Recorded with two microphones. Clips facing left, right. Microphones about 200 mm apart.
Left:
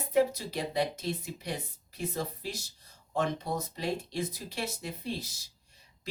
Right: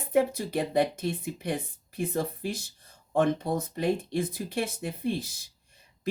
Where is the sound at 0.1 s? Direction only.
55° right (ahead or behind).